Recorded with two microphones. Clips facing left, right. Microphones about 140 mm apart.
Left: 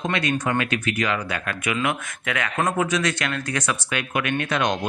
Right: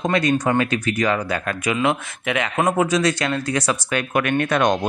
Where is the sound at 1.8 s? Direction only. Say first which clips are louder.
Right 5 dB; 25° right (ahead or behind).